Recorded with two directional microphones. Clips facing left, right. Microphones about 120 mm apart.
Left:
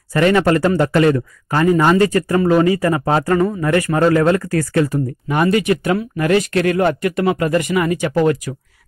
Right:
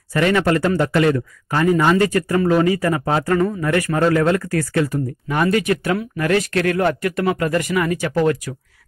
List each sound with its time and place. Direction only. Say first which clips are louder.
0.1 s speech: left 3 dB; 40° left (ahead or behind)
5.3 s speech: left 2 dB; 15° left (ahead or behind)